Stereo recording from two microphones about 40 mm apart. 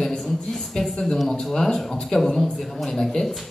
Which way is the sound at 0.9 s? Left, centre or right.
Centre.